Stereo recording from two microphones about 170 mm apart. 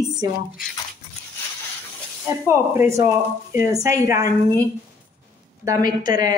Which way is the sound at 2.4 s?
15° right (ahead or behind).